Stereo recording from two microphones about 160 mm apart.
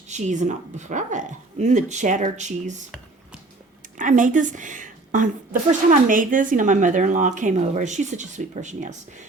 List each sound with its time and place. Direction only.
0.1 s speech: 50° right (ahead or behind)
3.9 s a woman's voice: 55° right (ahead or behind)